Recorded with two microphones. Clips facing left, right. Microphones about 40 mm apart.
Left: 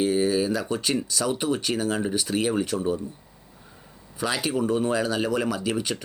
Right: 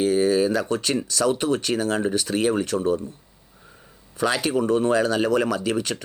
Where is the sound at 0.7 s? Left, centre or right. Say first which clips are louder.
Right 2 dB; centre.